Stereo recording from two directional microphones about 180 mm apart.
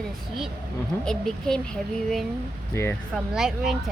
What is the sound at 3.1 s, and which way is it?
Speech, 5° right (ahead or behind).